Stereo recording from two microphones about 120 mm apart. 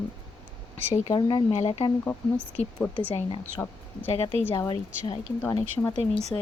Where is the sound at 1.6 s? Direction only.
60° left (ahead or behind).